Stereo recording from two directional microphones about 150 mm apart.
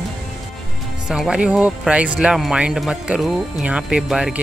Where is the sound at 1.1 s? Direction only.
5° right (ahead or behind).